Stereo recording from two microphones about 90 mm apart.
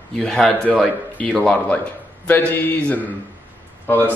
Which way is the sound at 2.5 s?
20° left (ahead or behind).